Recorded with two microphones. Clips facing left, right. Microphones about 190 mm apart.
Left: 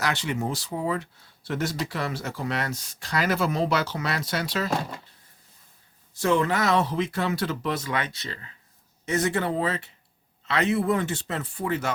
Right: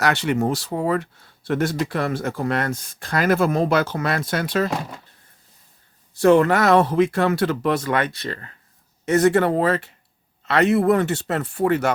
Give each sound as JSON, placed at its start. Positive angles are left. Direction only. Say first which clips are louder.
{"t": 0.0, "sound": "speech", "louder": "right 7 dB", "side_deg": -65}
{"t": 6.1, "sound": "speech", "louder": "right 8 dB", "side_deg": -60}